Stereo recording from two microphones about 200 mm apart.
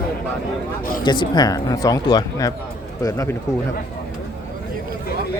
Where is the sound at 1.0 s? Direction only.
25° left (ahead or behind).